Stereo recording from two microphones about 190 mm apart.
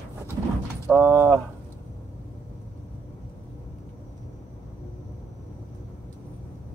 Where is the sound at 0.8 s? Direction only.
10° right (ahead or behind).